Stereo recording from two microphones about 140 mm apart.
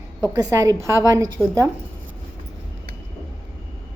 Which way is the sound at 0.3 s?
25° right (ahead or behind).